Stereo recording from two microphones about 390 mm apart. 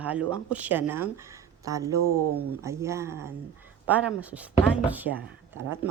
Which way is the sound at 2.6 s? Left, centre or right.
Centre.